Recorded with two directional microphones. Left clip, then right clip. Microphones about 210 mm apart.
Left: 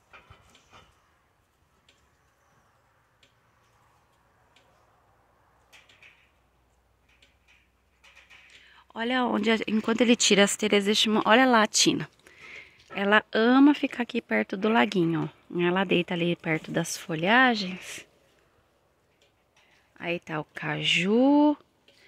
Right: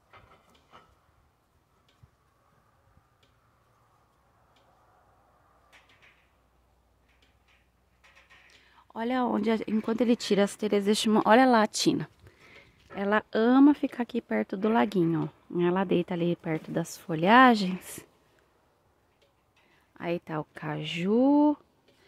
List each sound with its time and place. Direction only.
8.5 s speech: 10° right (ahead or behind)
10.9 s speech: 15° right (ahead or behind)
19.9 s speech: 10° right (ahead or behind)